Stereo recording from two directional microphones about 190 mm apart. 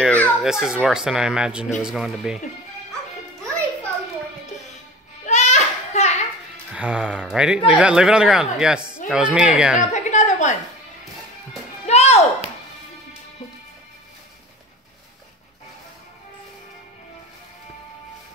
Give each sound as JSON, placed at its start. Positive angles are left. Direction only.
{"t": 0.0, "sound": "children playing", "side_deg": 10}
{"t": 0.4, "sound": "speech", "side_deg": -5}
{"t": 5.2, "sound": "children playing", "side_deg": 35}
{"t": 6.7, "sound": "speech", "side_deg": -5}
{"t": 9.8, "sound": "a sound", "side_deg": 40}
{"t": 11.8, "sound": "music", "side_deg": 35}